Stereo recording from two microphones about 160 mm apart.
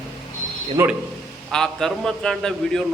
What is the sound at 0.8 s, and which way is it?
Speech, 15° right (ahead or behind).